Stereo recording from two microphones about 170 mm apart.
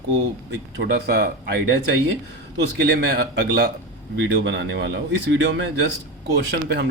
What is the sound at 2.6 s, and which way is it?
Speech, 75° right (ahead or behind).